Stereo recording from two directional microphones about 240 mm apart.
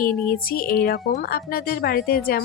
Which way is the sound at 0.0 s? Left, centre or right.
Left.